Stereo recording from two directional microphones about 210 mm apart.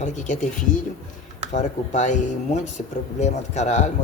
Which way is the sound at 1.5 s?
35° left (ahead or behind).